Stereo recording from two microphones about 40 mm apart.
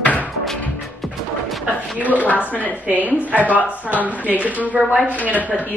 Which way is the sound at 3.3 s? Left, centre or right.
Right.